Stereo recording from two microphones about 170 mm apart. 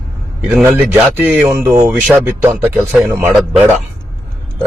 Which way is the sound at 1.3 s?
15° right (ahead or behind).